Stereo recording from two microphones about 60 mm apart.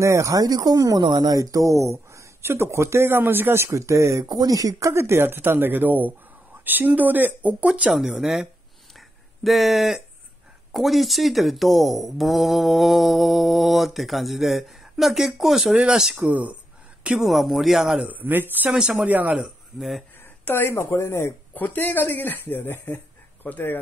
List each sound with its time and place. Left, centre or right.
0.0 s speech: right
7.9 s speech: centre
16.2 s speech: right
17.2 s speech: centre
17.9 s speech: right
20.4 s speech: left
21.5 s speech: left